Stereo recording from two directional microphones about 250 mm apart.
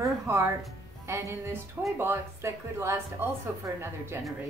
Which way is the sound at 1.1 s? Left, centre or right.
Centre.